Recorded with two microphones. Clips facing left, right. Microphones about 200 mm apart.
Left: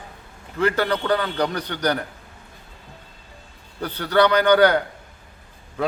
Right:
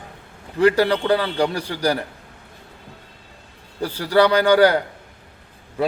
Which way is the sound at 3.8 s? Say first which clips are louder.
Right 2 dB; 10° right (ahead or behind).